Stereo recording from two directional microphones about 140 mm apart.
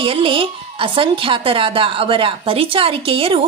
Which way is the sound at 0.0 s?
40° right (ahead or behind).